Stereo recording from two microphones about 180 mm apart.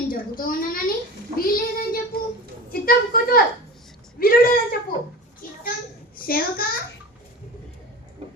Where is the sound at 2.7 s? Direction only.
55° left (ahead or behind).